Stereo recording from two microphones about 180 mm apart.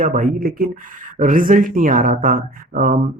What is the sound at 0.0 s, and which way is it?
Speech, 50° right (ahead or behind).